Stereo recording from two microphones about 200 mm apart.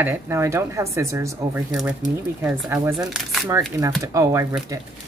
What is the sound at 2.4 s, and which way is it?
Speech, 10° right (ahead or behind).